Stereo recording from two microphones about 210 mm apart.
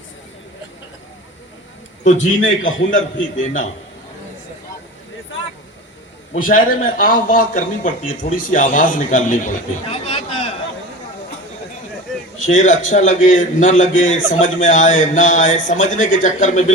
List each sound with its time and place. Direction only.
2.0 s a man's voice: 35° left (ahead or behind)
2.6 s a man's voice: 65° left (ahead or behind)
3.3 s a man's voice: 40° left (ahead or behind)
6.3 s a man's voice: 40° left (ahead or behind)
12.4 s a man's voice: 35° left (ahead or behind)